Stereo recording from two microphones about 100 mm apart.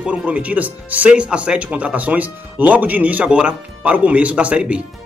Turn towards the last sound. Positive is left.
turn(degrees=-10)  # may be behind; listen again after turning